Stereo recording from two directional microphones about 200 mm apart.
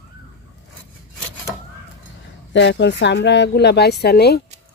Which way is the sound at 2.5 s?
65° left (ahead or behind).